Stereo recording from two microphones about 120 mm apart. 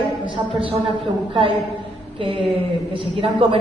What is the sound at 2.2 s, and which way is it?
A woman's voice, 45° right (ahead or behind).